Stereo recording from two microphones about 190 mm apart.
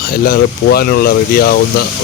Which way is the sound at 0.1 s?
50° left (ahead or behind).